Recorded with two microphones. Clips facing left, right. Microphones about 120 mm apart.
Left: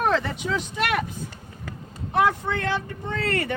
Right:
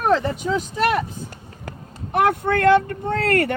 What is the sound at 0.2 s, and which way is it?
Speech, 40° right (ahead or behind).